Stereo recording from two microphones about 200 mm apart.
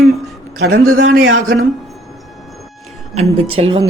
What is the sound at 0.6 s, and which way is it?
Speech, 50° right (ahead or behind).